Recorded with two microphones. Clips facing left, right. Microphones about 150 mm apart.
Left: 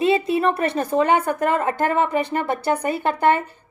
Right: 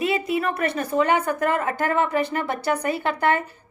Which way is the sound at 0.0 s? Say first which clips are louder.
Left 5 dB; 25° left (ahead or behind).